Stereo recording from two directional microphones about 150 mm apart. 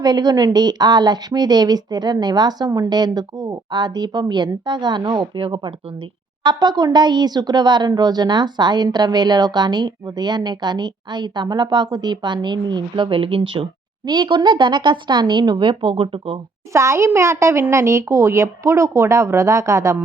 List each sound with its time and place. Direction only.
0.0 s speech: 25° right (ahead or behind)
16.7 s speech: 20° right (ahead or behind)